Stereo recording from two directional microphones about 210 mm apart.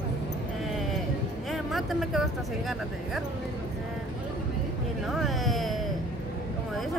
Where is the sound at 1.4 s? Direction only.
Centre (ahead or behind).